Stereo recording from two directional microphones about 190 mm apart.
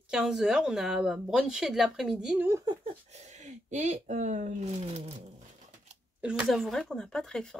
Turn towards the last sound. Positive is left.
turn(degrees=5)  # may be behind; listen again after turning